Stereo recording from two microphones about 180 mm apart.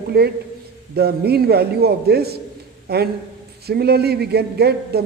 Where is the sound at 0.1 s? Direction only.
60° right (ahead or behind).